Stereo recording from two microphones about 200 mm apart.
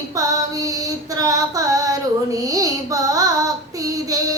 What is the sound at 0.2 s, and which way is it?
Female singing, 15° right (ahead or behind).